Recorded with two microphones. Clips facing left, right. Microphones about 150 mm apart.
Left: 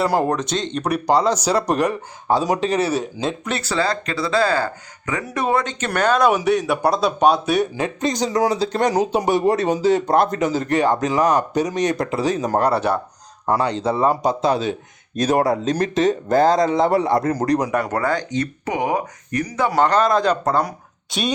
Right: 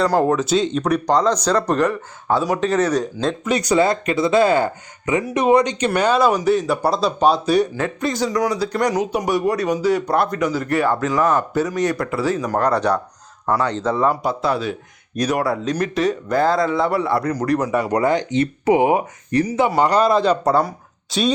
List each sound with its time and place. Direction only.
0.0 s speech: 5° left (ahead or behind)
3.5 s speech: 15° right (ahead or behind); by 7.7 s centre (ahead or behind)
7.8 s speech: 20° left (ahead or behind)
12.6 s speech: 5° left (ahead or behind)
17.7 s speech: centre (ahead or behind)
17.9 s speech: 20° right (ahead or behind)
19.7 s speech: 10° right (ahead or behind)